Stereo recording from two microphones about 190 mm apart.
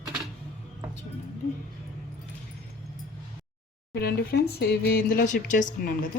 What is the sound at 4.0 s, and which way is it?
Speech, 55° left (ahead or behind).